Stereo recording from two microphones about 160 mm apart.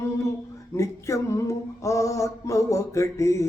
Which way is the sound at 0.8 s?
20° left (ahead or behind).